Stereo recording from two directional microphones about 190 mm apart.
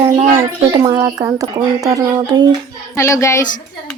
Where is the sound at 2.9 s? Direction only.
15° left (ahead or behind).